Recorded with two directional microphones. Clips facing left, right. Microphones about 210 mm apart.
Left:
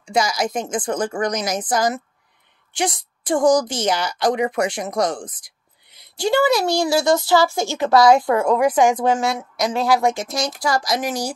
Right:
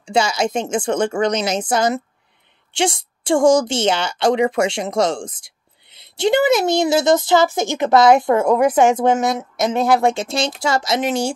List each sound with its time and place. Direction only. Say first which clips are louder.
0.0 s a woman's voice: right 2 dB; 30° right (ahead or behind)